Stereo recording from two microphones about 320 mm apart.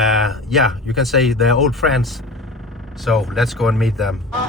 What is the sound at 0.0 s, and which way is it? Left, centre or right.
Speech, centre.